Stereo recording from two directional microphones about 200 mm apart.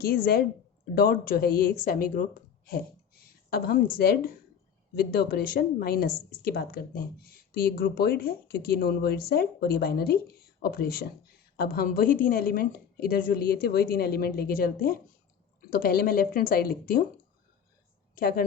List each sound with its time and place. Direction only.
0.0 s speech: 50° left (ahead or behind)
2.6 s a sound: 50° left (ahead or behind)
3.9 s speech: 50° left (ahead or behind)
18.1 s a woman's voice: 45° left (ahead or behind)